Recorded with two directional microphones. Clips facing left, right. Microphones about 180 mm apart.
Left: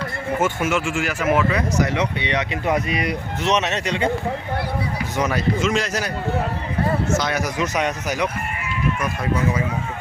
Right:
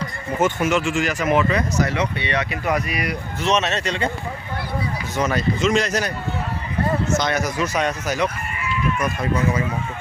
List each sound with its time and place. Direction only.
0.4 s speech: 10° left (ahead or behind)
1.8 s speech: 20° left (ahead or behind)
5.1 s speech: 10° left (ahead or behind)
7.1 s speech: 5° left (ahead or behind)